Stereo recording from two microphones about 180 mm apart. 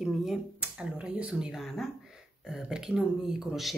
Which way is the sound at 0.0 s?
Centre (ahead or behind).